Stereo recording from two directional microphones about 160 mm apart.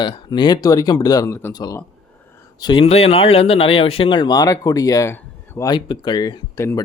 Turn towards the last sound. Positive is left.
turn(degrees=20)  # may be behind; listen again after turning